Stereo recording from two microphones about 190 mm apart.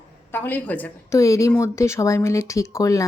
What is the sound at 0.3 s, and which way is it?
Speech, 10° left (ahead or behind).